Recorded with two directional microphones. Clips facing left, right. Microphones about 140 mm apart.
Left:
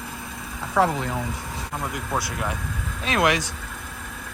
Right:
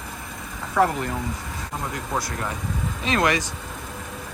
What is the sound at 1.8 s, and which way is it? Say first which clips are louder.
Speech: even; 5° left (ahead or behind).